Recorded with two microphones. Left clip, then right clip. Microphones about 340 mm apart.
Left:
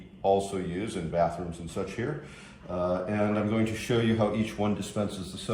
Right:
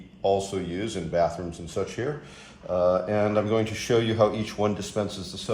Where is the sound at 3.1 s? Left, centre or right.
Right.